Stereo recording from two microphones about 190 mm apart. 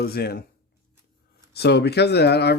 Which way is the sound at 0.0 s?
55° left (ahead or behind).